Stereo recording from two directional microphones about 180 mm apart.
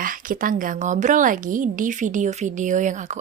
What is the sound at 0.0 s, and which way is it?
Speech, 50° right (ahead or behind).